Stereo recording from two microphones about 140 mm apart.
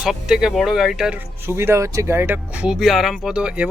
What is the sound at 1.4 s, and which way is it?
Speech, 20° right (ahead or behind).